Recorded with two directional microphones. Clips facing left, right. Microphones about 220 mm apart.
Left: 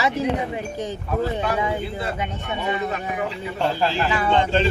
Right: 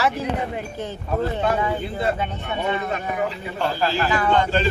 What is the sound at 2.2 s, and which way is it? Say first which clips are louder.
Speech: right 1 dB; 15° left (ahead or behind).